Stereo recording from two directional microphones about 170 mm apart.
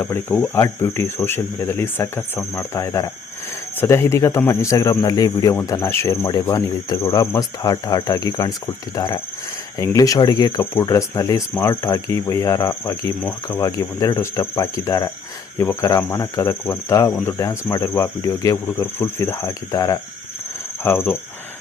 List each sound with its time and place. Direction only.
0.0 s speech: 15° left (ahead or behind)